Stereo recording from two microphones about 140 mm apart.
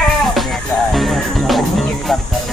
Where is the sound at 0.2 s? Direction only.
Centre (ahead or behind).